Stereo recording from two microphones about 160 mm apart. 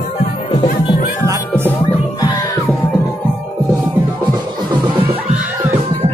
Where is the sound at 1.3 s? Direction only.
15° right (ahead or behind).